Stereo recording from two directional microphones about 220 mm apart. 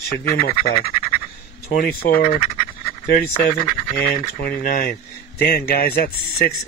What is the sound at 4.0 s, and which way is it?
Speech, 45° left (ahead or behind).